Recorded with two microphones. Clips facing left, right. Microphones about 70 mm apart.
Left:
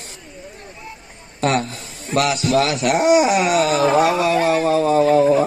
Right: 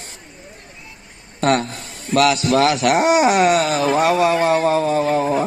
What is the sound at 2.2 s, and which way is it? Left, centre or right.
A man's voice, right.